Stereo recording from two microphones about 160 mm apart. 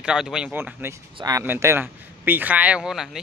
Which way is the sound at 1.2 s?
25° right (ahead or behind).